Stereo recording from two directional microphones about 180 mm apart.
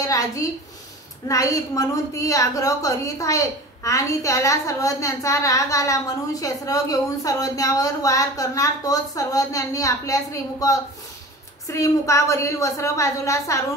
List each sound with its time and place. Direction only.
0.0 s a woman's voice: 20° left (ahead or behind)